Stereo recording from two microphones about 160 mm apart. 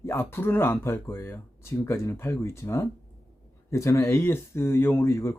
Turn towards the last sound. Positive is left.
turn(degrees=15)  # may be behind; listen again after turning